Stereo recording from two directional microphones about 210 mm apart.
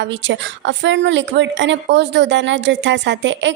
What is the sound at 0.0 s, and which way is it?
A woman's voice, 60° right (ahead or behind).